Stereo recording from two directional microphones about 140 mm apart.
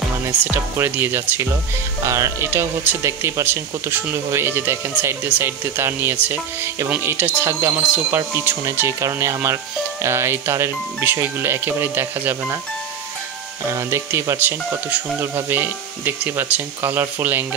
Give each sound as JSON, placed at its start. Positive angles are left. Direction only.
{"t": 0.7, "sound": "speech", "side_deg": -15}
{"t": 8.2, "sound": "speech", "side_deg": -20}
{"t": 13.7, "sound": "speech", "side_deg": -20}